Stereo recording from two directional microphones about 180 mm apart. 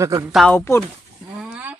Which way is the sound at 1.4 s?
10° right (ahead or behind).